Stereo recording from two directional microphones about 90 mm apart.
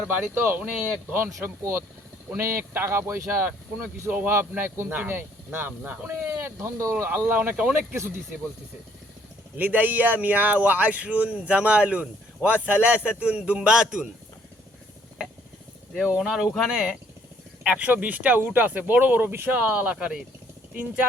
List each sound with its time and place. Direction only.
0.3 s speech: 20° right (ahead or behind)
6.1 s speech: 30° right (ahead or behind)
7.0 s speech: 20° right (ahead or behind)
9.6 s a man's voice: 20° right (ahead or behind)
16.0 s a man's voice: 10° right (ahead or behind)
17.6 s a man's voice: 15° right (ahead or behind)